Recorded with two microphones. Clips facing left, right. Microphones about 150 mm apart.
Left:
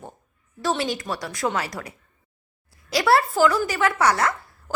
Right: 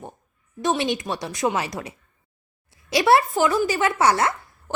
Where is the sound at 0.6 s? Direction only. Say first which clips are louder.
Right 2 dB; 20° right (ahead or behind).